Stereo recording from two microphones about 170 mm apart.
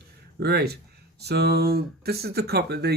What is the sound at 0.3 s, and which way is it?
Speech, 70° right (ahead or behind).